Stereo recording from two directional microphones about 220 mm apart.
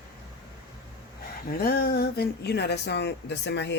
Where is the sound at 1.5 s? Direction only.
45° left (ahead or behind).